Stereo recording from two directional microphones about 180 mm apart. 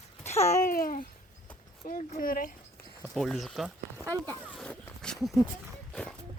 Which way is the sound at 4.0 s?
20° right (ahead or behind).